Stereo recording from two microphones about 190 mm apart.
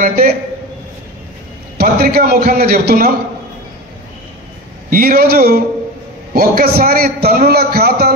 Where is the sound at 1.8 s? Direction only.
55° right (ahead or behind).